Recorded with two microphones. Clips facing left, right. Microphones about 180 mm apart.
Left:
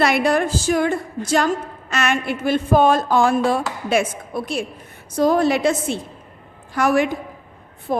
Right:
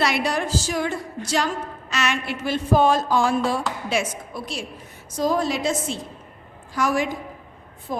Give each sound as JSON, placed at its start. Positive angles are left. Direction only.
{"t": 0.0, "sound": "a woman's voice", "side_deg": 55}